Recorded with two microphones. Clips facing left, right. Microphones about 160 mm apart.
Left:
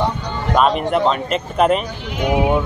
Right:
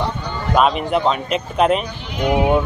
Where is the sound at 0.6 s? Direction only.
5° right (ahead or behind).